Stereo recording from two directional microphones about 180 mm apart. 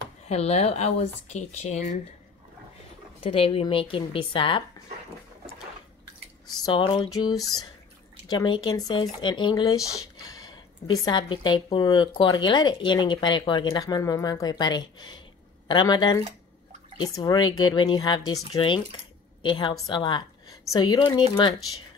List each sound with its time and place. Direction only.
0.2 s speech: 35° left (ahead or behind)
3.2 s a woman's voice: 30° left (ahead or behind)
6.4 s a woman's voice: 25° left (ahead or behind)